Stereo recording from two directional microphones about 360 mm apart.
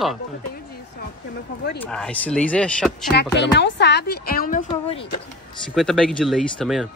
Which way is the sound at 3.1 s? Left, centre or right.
Left.